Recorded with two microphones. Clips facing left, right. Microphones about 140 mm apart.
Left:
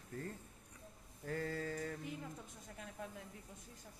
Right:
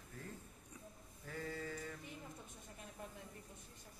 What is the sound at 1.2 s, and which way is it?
Speech, 50° left (ahead or behind).